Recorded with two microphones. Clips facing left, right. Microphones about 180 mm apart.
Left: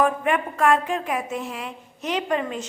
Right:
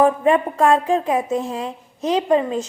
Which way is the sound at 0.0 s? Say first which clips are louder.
Right 6 dB; 30° right (ahead or behind).